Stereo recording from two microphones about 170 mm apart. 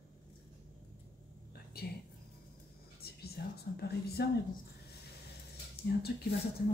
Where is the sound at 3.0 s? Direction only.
65° left (ahead or behind).